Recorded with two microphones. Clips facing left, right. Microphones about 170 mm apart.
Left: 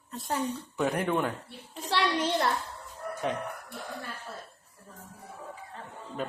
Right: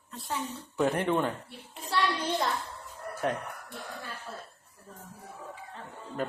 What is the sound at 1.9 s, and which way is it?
Speech, 85° left.